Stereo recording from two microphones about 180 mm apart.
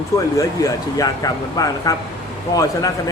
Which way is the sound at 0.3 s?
20° left (ahead or behind).